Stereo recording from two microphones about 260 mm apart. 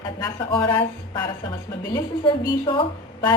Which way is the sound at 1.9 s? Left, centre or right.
Centre.